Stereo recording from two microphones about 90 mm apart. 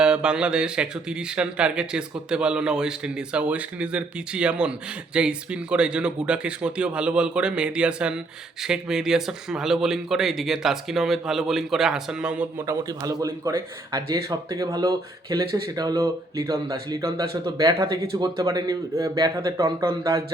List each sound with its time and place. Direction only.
0.0 s speech: 10° right (ahead or behind)
12.9 s speech: 40° right (ahead or behind)
19.5 s speech: 30° right (ahead or behind)